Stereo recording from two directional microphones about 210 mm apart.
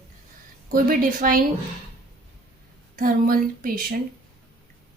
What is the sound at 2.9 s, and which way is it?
Speech, 40° right (ahead or behind).